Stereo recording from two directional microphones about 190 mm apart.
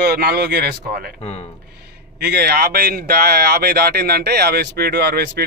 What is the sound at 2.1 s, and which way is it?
Speech, 60° right (ahead or behind).